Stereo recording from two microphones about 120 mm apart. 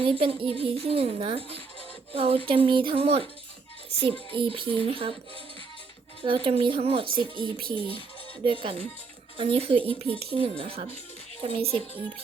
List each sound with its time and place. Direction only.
0.0 s speech: 50° right (ahead or behind)
6.2 s speech: 45° right (ahead or behind)